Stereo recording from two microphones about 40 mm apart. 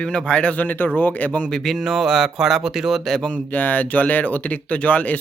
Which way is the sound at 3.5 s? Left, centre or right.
Left.